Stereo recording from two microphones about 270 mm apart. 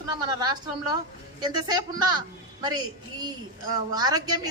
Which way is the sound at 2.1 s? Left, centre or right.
Centre.